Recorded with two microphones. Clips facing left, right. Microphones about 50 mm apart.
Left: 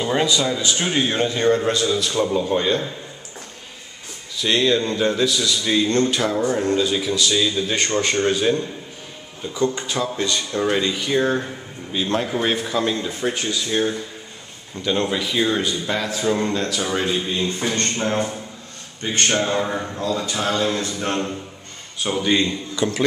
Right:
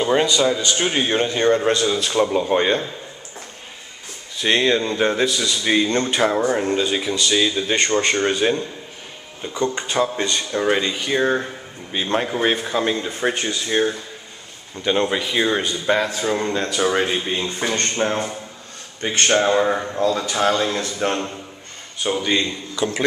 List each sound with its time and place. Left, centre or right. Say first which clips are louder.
0.0 s a man's voice: right 3 dB; centre
1.7 s speech: right 1 dB; right
4.4 s speech: right 1 dB; right
9.8 s speech: right 3 dB; right
10.5 s speech: right 1 dB; centre
16.6 s speech: right 3 dB; right
19.4 s speech: right 4 dB; right
20.0 s speech: right 4 dB; right
22.0 s speech: left 1 dB; centre